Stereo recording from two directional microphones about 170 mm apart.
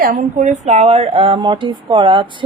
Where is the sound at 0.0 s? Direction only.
55° right (ahead or behind).